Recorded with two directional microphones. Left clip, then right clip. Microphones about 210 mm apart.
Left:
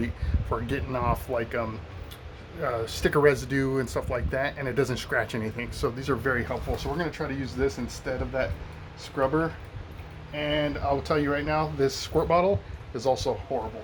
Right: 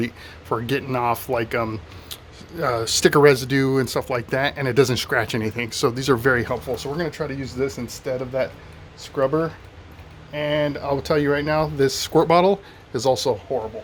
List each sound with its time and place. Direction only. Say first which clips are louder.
0.5 s speech: right 7 dB; 45° right (ahead or behind)